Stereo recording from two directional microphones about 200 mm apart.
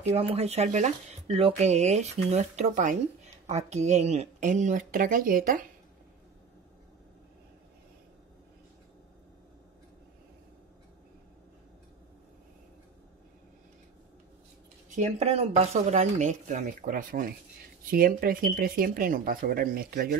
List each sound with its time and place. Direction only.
0.0 s speech: 30° right (ahead or behind)
15.0 s speech: 35° right (ahead or behind)